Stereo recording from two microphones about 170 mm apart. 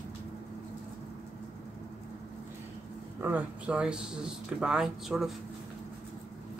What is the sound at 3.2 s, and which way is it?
Speech, 10° right (ahead or behind).